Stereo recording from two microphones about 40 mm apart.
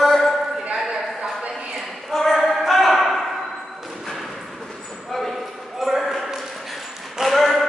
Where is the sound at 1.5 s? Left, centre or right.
Centre.